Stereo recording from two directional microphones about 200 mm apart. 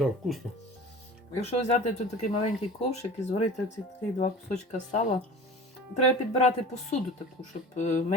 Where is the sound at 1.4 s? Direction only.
35° left (ahead or behind).